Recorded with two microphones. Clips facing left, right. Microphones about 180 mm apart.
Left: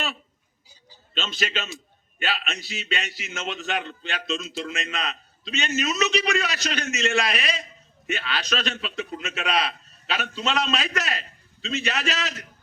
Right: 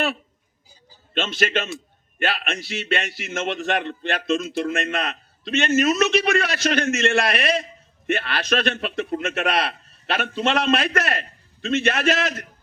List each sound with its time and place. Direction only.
1.1 s a man's voice: 55° right (ahead or behind)